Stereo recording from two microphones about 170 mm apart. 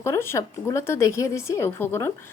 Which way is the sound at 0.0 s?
15° left (ahead or behind).